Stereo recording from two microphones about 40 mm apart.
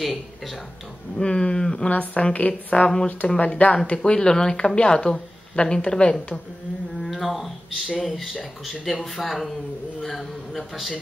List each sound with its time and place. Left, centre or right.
1.1 s speech: left
1.9 s a woman's voice: left
3.8 s speech: left
7.0 s speech: centre